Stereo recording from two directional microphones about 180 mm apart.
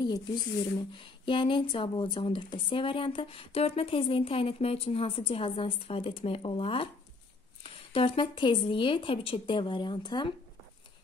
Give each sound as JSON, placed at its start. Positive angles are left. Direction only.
{"t": 0.0, "sound": "speech", "side_deg": 20}
{"t": 7.9, "sound": "speech", "side_deg": 30}